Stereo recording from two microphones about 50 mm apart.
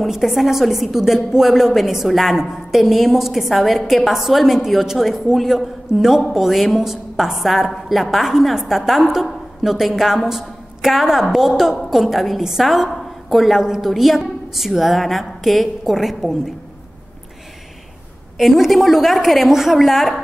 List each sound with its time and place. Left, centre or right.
0.0 s a woman's voice: centre
18.4 s a woman's voice: centre